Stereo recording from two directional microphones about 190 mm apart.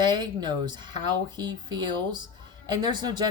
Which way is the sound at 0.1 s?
25° right (ahead or behind).